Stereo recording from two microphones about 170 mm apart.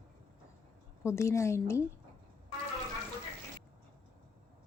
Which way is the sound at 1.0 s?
15° left (ahead or behind).